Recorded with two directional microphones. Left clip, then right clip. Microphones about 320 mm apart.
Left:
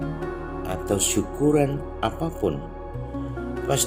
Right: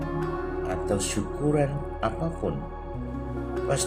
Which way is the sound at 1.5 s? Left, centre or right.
Left.